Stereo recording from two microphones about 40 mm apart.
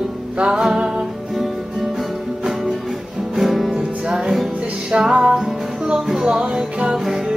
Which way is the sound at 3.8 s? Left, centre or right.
Centre.